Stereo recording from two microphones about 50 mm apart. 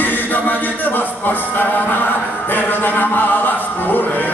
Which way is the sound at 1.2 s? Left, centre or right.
Left.